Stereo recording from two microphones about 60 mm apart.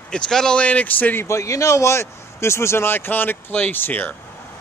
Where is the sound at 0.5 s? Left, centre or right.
Left.